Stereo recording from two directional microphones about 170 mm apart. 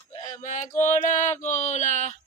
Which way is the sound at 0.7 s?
45° left (ahead or behind).